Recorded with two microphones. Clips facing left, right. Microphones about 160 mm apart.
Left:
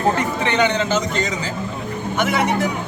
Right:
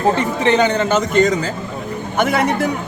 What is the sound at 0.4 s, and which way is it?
Speech, 35° right (ahead or behind).